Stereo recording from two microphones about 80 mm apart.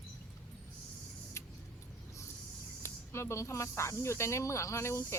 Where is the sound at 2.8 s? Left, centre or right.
Left.